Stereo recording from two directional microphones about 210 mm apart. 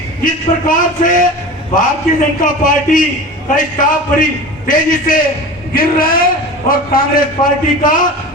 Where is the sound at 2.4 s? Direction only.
40° left (ahead or behind).